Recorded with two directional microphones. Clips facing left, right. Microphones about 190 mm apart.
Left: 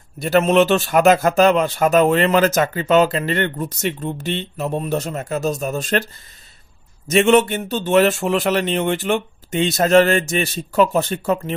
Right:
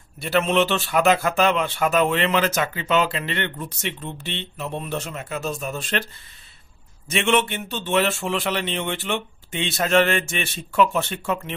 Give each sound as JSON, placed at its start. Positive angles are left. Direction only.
{"t": 0.2, "sound": "speech", "side_deg": 40}
{"t": 7.1, "sound": "a man's voice", "side_deg": 40}